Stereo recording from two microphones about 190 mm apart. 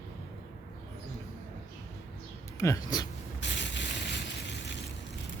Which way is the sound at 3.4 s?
70° left (ahead or behind).